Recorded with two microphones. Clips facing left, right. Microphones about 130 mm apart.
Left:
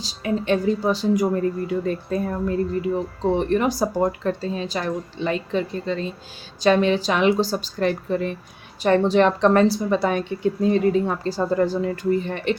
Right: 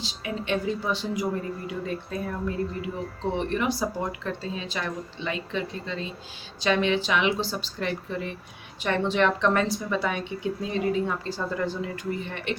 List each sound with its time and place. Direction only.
0.0 s speech: 40° left (ahead or behind)
3.3 s a woman's voice: 40° left (ahead or behind)